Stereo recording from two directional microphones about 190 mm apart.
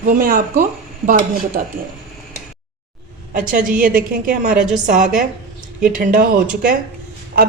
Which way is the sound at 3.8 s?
45° right (ahead or behind).